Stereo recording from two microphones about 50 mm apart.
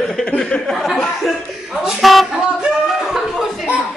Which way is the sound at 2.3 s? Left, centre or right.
Centre.